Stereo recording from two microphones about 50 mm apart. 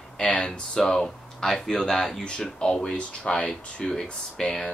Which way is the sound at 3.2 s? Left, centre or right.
Left.